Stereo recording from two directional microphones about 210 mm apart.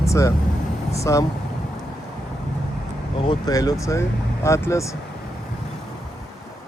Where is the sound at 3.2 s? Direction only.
20° left (ahead or behind).